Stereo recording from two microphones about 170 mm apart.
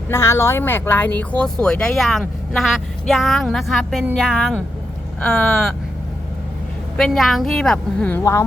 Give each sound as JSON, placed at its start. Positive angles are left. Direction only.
{"t": 0.1, "sound": "speech", "side_deg": 15}
{"t": 6.9, "sound": "speech", "side_deg": 5}
{"t": 8.2, "sound": "speech", "side_deg": 15}